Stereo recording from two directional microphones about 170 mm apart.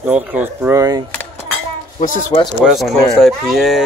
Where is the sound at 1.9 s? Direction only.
50° left (ahead or behind).